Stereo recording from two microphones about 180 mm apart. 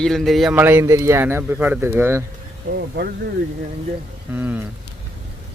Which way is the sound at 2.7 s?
65° right (ahead or behind).